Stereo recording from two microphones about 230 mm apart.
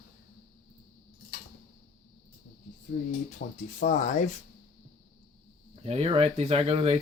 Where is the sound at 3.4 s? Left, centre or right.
Left.